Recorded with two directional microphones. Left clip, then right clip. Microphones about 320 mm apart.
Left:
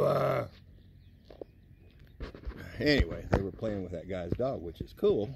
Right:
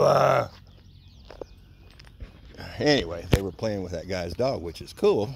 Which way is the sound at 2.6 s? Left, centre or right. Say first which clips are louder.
Right 6 dB; centre.